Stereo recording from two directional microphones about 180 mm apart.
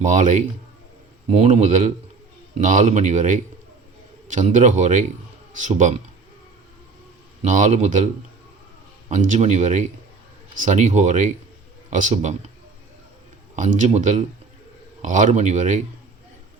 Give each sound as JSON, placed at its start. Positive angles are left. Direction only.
{"t": 0.0, "sound": "speech", "side_deg": -40}
{"t": 7.4, "sound": "speech", "side_deg": -45}
{"t": 13.6, "sound": "speech", "side_deg": -40}